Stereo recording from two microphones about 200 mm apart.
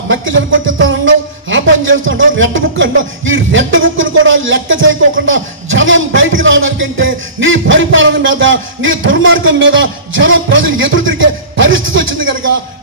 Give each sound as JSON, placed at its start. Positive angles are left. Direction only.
{"t": 0.1, "sound": "music", "side_deg": -75}